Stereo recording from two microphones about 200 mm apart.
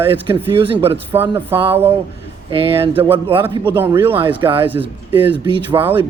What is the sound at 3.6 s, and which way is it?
Speech, 10° right (ahead or behind).